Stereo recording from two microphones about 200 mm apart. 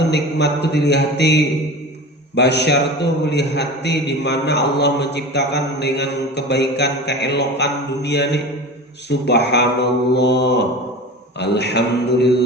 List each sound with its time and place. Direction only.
0.1 s a man's voice: 55° left (ahead or behind)